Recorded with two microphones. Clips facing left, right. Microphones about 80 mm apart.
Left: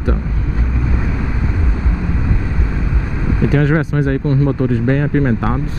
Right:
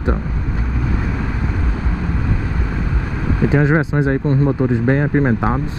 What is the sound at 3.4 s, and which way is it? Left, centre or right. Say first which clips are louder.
Speech: even; right.